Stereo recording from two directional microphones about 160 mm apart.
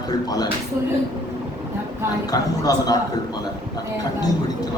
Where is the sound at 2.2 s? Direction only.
25° left (ahead or behind).